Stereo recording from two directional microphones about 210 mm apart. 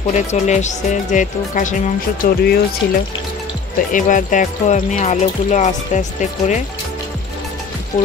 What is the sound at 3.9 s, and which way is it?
Speech, 40° left (ahead or behind).